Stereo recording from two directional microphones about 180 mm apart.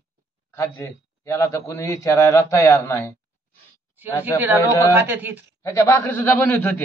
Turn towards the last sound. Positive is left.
turn(degrees=10)  # may be behind; listen again after turning